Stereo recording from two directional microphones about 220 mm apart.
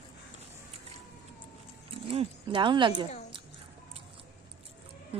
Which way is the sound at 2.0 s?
25° right (ahead or behind).